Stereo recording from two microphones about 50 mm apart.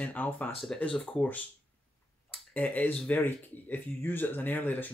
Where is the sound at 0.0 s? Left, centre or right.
Left.